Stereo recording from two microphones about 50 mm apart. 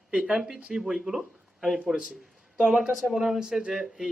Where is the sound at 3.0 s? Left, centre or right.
Centre.